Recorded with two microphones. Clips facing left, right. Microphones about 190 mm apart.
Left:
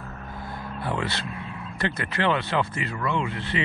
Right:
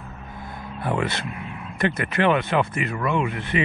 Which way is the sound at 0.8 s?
20° right (ahead or behind).